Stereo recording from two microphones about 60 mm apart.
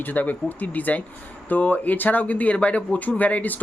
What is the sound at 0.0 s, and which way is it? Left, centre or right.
Speech, left.